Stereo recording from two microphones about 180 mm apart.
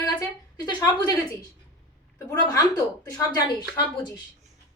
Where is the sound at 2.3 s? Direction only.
20° left (ahead or behind).